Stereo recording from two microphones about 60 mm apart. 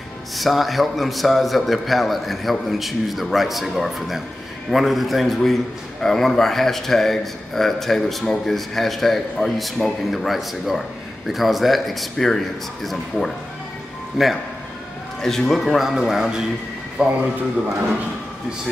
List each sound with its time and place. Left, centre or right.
0.4 s a man's voice: centre
17.0 s speech: centre